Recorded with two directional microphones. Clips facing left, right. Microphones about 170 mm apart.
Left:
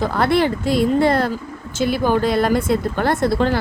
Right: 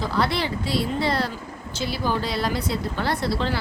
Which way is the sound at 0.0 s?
50° left (ahead or behind).